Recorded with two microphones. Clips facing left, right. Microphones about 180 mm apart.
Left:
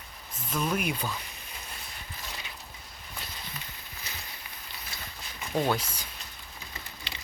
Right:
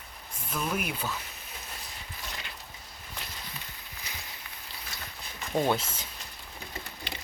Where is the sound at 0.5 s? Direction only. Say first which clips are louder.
Left 3 dB; 5° right (ahead or behind).